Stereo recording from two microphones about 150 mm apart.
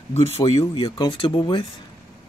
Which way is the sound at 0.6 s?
30° left (ahead or behind).